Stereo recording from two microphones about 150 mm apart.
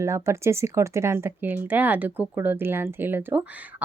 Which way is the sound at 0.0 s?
20° right (ahead or behind).